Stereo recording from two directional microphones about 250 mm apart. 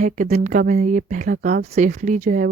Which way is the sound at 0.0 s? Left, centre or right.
Right.